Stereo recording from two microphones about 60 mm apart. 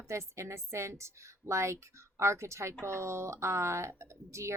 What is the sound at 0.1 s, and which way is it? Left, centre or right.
A woman's voice, right.